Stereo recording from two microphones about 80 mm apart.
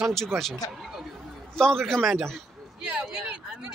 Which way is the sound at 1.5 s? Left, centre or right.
Centre.